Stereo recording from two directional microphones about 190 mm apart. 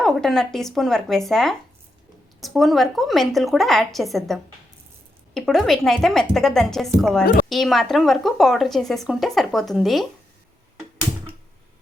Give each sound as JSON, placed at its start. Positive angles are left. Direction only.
{"t": 0.0, "sound": "a woman's voice", "side_deg": 0}